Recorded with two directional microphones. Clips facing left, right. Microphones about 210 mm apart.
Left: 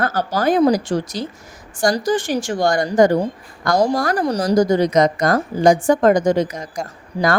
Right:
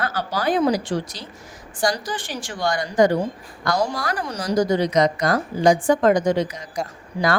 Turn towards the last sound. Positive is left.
turn(degrees=35)  # may be behind; listen again after turning